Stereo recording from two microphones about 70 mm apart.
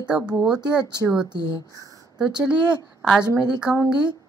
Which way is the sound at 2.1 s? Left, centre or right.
Centre.